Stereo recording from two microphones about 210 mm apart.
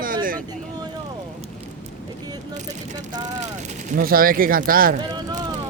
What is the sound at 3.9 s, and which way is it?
Speech, 45° right (ahead or behind).